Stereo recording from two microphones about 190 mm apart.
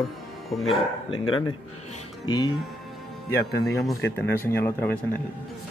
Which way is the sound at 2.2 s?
25° left (ahead or behind).